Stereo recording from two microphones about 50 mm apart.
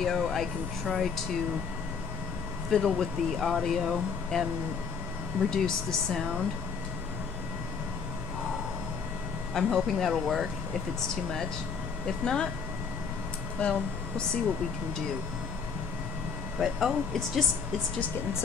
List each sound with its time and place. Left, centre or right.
0.0 s speech: centre
2.7 s speech: centre
5.5 s speech: centre
9.5 s speech: centre
11.0 s speech: centre
13.6 s speech: left
16.5 s speech: centre